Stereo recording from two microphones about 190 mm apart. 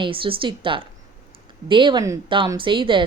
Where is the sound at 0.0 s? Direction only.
25° right (ahead or behind).